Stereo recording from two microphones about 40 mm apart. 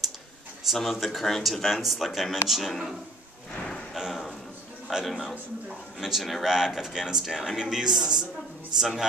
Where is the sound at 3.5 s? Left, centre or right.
Left.